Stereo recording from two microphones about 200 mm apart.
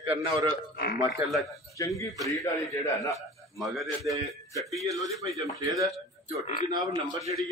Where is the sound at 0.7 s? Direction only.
50° left (ahead or behind).